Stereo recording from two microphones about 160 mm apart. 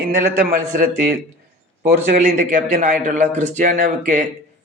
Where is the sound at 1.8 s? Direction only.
55° right (ahead or behind).